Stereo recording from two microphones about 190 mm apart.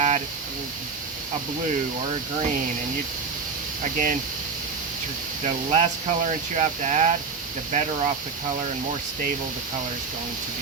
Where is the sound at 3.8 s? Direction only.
45° right (ahead or behind).